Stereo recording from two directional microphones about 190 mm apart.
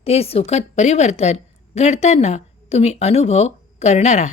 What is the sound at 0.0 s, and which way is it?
A woman's voice, 30° left (ahead or behind).